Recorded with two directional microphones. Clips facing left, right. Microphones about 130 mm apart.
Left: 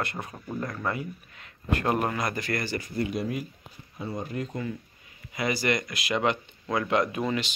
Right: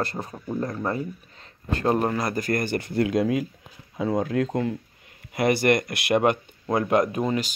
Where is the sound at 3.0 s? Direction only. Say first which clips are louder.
Right 8 dB; 90° right.